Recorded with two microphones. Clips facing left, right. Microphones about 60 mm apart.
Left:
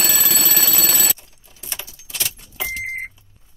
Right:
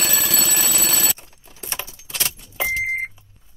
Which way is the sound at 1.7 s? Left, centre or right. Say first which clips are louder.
Right 2 dB; right.